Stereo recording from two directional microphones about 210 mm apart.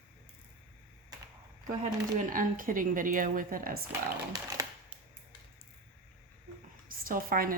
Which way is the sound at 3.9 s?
15° right (ahead or behind).